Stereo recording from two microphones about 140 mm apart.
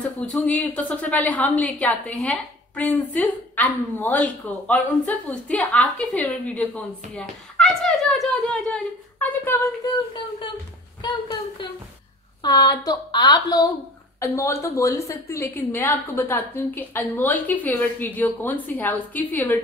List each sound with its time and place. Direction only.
0.3 s a woman's voice: 10° left (ahead or behind)
9.5 s a woman's voice: 20° left (ahead or behind)
11.0 s a woman's voice: 35° left (ahead or behind); by 19.6 s 15° left (ahead or behind)